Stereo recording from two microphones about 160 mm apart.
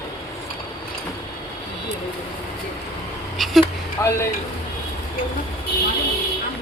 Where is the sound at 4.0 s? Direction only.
20° left (ahead or behind).